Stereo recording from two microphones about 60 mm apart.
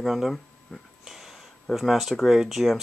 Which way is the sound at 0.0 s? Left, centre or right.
Centre.